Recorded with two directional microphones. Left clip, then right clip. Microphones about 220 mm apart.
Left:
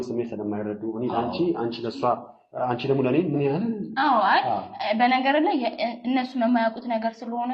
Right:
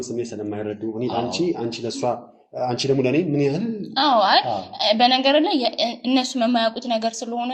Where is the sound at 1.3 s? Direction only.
50° right (ahead or behind).